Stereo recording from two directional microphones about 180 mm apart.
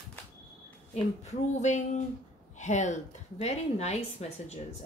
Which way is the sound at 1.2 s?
40° left (ahead or behind).